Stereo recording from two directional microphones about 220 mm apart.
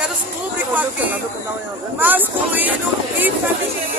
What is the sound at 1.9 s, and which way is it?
Speech, 10° right (ahead or behind).